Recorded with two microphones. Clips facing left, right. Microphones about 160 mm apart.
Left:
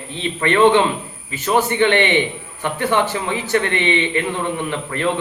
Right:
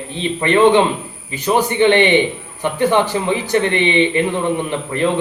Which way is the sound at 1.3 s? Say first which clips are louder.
Right 2 dB; 15° right (ahead or behind).